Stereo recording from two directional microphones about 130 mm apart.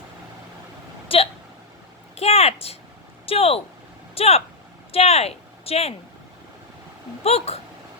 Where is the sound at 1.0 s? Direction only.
45° left (ahead or behind).